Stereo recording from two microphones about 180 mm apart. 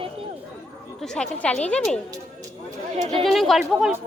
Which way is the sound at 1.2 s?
5° left (ahead or behind).